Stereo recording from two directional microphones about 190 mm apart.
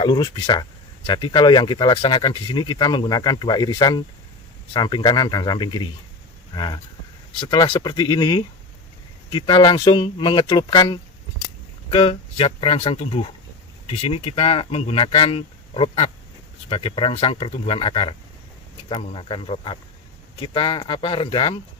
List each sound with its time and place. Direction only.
0.0 s speech: 25° left (ahead or behind)